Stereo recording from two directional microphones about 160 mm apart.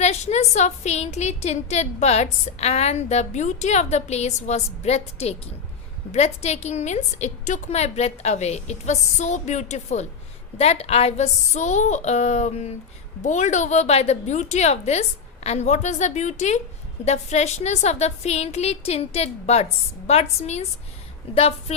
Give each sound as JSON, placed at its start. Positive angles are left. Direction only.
{"t": 0.0, "sound": "a woman's voice", "side_deg": 45}